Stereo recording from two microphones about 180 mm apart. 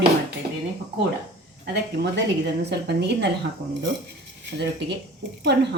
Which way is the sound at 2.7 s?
70° right (ahead or behind).